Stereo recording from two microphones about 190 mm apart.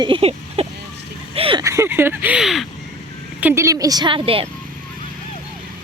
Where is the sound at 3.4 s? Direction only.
10° right (ahead or behind); by 4.5 s 30° right (ahead or behind).